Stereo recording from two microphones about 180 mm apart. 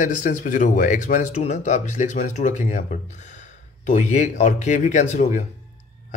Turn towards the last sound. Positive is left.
turn(degrees=40)  # may be behind; listen again after turning